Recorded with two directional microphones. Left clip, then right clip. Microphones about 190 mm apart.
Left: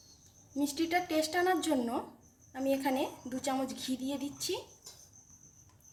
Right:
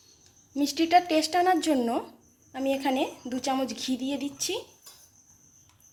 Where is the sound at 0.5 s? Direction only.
40° right (ahead or behind).